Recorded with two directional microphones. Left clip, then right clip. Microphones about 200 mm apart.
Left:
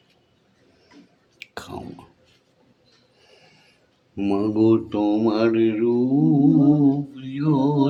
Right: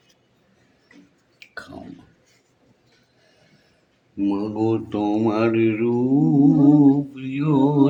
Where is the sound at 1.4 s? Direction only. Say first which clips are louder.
Left 2 dB; 65° left (ahead or behind).